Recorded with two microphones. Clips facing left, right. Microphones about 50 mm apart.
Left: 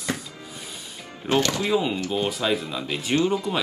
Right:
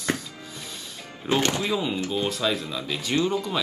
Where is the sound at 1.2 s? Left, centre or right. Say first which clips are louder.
Left 1 dB; centre.